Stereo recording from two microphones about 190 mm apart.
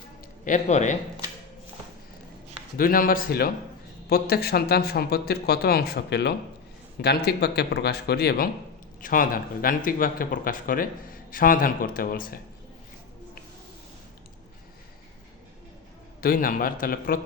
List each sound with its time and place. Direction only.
0.4 s a man's voice: 40° left (ahead or behind)
2.7 s speech: 50° left (ahead or behind)
9.0 s speech: 45° left (ahead or behind)
16.2 s speech: 50° left (ahead or behind)